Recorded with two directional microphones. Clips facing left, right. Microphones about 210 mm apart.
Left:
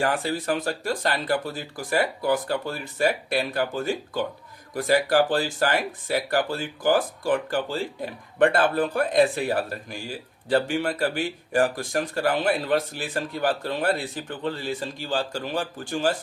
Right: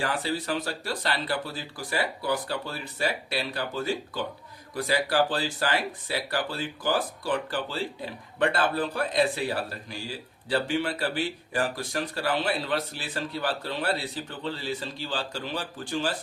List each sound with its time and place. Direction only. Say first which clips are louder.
0.0 s speech: left 4 dB; 50° left (ahead or behind)